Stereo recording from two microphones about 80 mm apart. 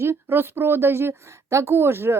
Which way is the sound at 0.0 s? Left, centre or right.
Right.